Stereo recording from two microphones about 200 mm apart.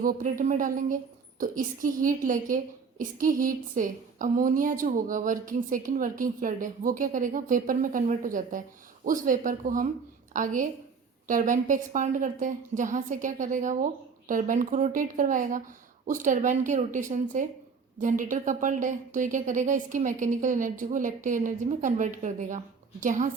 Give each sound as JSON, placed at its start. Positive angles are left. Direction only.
{"t": 0.0, "sound": "a woman's voice", "side_deg": -45}